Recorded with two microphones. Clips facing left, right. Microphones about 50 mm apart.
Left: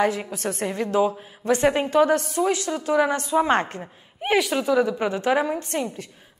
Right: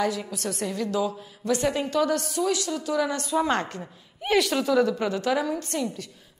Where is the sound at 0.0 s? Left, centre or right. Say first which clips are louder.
Left 4 dB; left.